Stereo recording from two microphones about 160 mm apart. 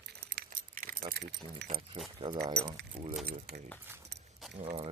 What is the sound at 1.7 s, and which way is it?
Speech, 35° right (ahead or behind).